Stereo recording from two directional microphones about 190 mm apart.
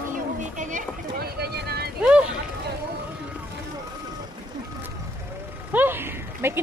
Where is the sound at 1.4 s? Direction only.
60° right (ahead or behind).